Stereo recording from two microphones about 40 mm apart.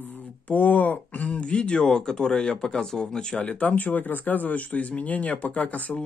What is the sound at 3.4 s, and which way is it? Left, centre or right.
Speech, left.